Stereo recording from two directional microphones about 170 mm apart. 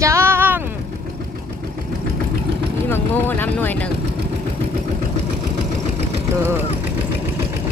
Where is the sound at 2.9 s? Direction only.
10° left (ahead or behind).